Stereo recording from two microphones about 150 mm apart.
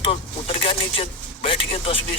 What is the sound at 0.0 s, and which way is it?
Speech, 40° left (ahead or behind).